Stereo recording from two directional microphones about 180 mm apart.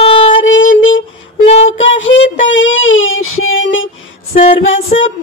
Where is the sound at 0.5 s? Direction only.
90° left.